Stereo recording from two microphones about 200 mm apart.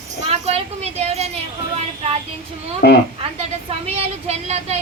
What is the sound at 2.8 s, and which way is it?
Speech, 55° left (ahead or behind).